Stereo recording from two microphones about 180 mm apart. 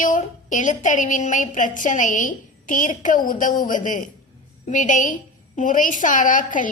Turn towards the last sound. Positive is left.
turn(degrees=45)  # may be behind; listen again after turning